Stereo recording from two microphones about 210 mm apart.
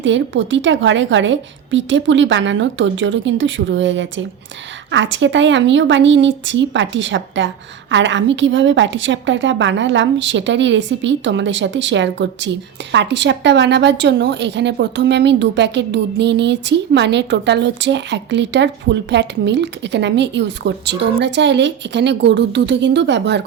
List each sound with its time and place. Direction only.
0.0 s a woman's voice: 60° right (ahead or behind)